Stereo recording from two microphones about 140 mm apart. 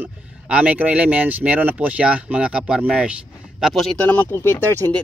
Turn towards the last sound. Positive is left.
turn(degrees=15)  # may be behind; listen again after turning